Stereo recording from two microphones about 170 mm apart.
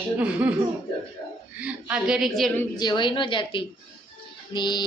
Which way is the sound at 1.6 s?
10° right (ahead or behind).